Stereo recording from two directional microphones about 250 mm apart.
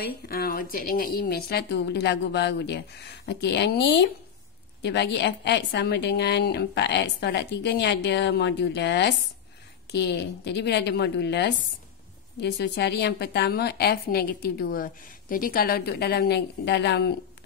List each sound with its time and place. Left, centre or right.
0.0 s a woman's voice: left